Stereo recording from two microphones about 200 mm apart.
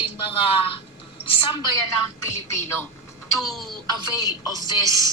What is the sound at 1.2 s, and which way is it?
Speech, 25° left (ahead or behind).